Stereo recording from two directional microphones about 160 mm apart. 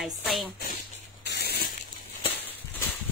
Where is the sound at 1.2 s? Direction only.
85° left.